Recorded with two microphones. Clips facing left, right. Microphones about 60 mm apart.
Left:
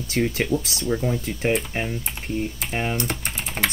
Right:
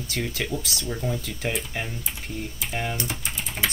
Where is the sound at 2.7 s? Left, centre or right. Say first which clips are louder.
Left 3 dB; left.